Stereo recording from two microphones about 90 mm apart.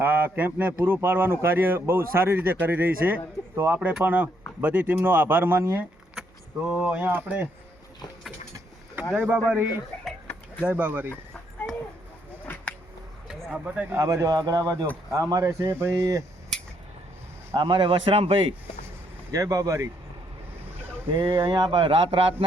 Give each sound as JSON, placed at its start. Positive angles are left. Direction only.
{"t": 0.0, "sound": "speech", "side_deg": -20}
{"t": 3.8, "sound": "speech", "side_deg": -20}
{"t": 6.7, "sound": "speech", "side_deg": -15}
{"t": 9.1, "sound": "speech", "side_deg": -20}
{"t": 13.2, "sound": "a sound", "side_deg": -10}
{"t": 14.0, "sound": "speech", "side_deg": -40}
{"t": 17.6, "sound": "a man's voice", "side_deg": -65}
{"t": 19.3, "sound": "speech", "side_deg": -40}
{"t": 21.2, "sound": "speech", "side_deg": -45}
{"t": 21.4, "sound": "speech", "side_deg": -65}